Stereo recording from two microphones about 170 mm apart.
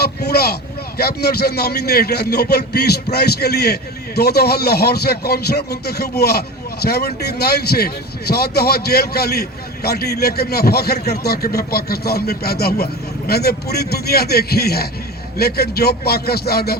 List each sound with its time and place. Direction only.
0.2 s a man's voice: 65° left (ahead or behind)